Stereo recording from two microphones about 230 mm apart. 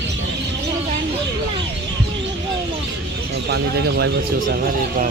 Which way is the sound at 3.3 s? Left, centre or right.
Right.